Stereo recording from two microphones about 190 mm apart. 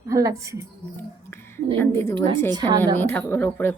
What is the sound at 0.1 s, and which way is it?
Speech, 15° right (ahead or behind).